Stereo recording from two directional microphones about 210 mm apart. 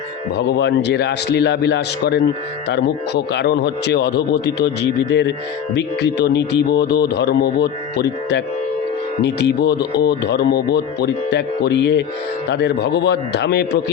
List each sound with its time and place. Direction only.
0.3 s speech: 55° left (ahead or behind)